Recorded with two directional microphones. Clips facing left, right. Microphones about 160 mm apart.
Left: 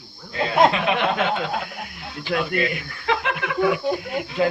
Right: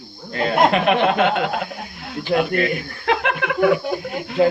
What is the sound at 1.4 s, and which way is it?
Speech, 60° right (ahead or behind).